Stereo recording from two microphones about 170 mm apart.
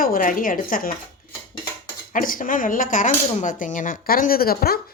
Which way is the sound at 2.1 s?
55° left (ahead or behind).